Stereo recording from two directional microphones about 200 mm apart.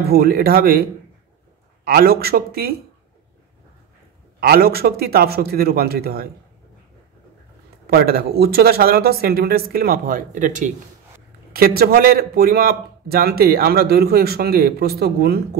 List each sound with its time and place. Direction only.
0.1 s a man's voice: 50° right (ahead or behind)
1.9 s a man's voice: 50° right (ahead or behind)
4.4 s a man's voice: 50° right (ahead or behind)
7.8 s a man's voice: 50° right (ahead or behind)
11.5 s a man's voice: 50° right (ahead or behind)